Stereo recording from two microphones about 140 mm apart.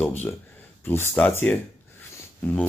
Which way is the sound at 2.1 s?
15° left (ahead or behind).